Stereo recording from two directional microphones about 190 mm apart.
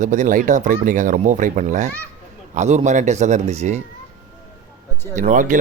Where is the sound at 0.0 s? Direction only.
40° right (ahead or behind).